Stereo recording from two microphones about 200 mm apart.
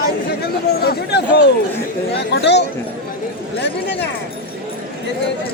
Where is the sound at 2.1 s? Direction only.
60° left (ahead or behind).